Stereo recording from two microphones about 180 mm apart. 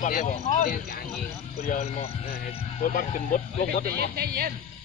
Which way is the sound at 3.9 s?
60° right (ahead or behind).